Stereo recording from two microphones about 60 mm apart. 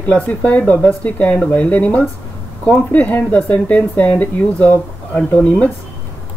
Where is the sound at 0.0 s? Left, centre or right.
Left.